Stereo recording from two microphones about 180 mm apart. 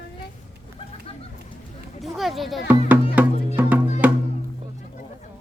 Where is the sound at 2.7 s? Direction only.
10° right (ahead or behind).